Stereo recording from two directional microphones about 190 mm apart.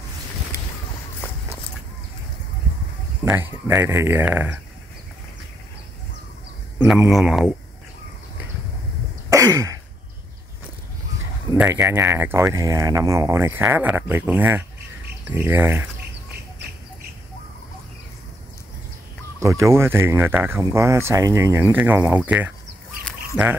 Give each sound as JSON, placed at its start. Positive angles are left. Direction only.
{"t": 3.3, "sound": "speech", "side_deg": -10}
{"t": 6.9, "sound": "speech", "side_deg": 0}
{"t": 9.3, "sound": "a sound", "side_deg": -15}
{"t": 11.5, "sound": "speech", "side_deg": -5}
{"t": 19.6, "sound": "speech", "side_deg": -15}
{"t": 23.0, "sound": "duck", "side_deg": -5}